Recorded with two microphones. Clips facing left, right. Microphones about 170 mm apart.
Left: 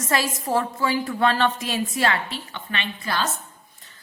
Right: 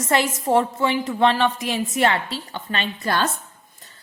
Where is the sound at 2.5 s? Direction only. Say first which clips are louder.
Right 4 dB; 40° right (ahead or behind).